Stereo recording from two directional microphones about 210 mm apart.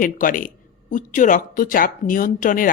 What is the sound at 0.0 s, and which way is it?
A woman's voice, 40° left (ahead or behind).